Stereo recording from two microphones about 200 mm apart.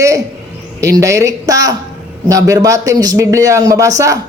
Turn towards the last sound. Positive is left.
turn(degrees=-15)  # may be behind; listen again after turning